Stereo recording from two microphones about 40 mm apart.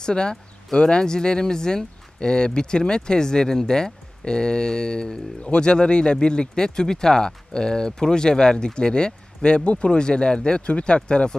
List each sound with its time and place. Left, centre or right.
0.0 s speech: centre